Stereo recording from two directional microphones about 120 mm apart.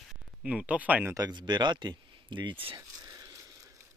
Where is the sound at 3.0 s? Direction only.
30° right (ahead or behind).